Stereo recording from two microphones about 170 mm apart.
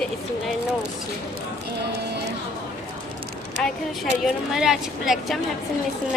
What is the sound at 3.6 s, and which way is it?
Speech, centre (ahead or behind).